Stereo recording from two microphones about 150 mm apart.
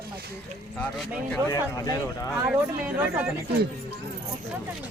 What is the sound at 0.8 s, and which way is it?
Speech, 10° left (ahead or behind).